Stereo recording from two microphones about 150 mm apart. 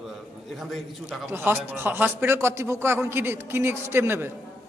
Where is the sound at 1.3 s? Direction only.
15° right (ahead or behind).